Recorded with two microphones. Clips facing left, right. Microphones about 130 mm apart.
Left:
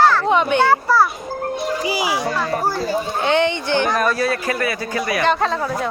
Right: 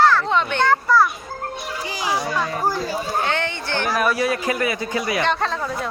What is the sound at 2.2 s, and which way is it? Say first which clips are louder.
Speech: left 2 dB; 5° right (ahead or behind).